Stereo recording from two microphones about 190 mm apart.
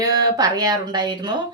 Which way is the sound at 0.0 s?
20° right (ahead or behind).